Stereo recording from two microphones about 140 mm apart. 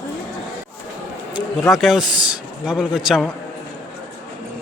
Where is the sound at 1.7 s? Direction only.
Centre (ahead or behind).